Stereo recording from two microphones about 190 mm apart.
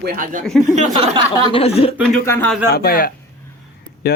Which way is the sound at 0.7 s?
30° right (ahead or behind).